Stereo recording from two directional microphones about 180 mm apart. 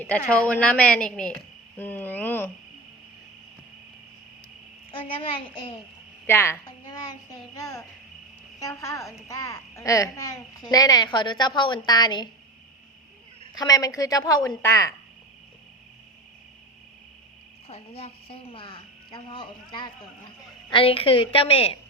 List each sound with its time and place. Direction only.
0.0 s a woman's voice: 5° left (ahead or behind)
1.8 s cricket: 10° left (ahead or behind)
4.9 s a child's voice: 30° left (ahead or behind)
6.2 s a child's voice: 15° left (ahead or behind)
13.5 s a child's voice: 20° left (ahead or behind)
17.7 s a child's voice: 35° left (ahead or behind)